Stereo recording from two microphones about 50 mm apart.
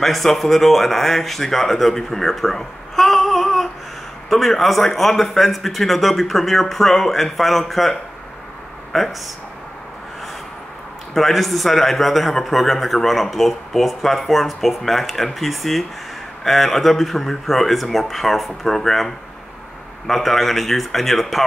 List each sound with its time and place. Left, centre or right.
0.0 s a man's voice: centre
11.1 s a man's voice: centre